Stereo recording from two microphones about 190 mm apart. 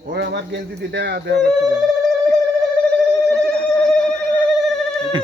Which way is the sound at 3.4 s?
5° left (ahead or behind).